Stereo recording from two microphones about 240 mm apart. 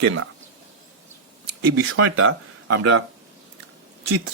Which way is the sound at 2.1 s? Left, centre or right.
Right.